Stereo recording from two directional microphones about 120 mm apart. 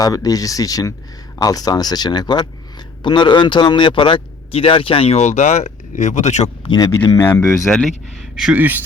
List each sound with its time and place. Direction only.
0.0 s speech: 30° left (ahead or behind); by 6.5 s 75° left (ahead or behind)
6.7 s speech: 30° left (ahead or behind)
7.2 s speech: 20° left (ahead or behind)
7.4 s speech: 5° left (ahead or behind)